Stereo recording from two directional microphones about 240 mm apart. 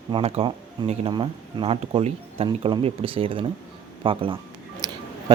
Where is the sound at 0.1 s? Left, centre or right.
Right.